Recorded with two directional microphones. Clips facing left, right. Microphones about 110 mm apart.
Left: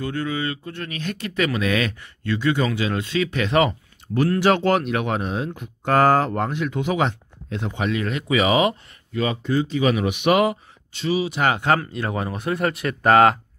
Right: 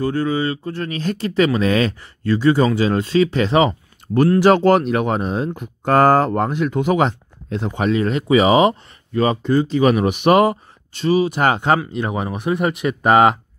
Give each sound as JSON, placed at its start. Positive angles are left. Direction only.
{"t": 0.0, "sound": "speech", "side_deg": -35}
{"t": 11.9, "sound": "speech", "side_deg": -20}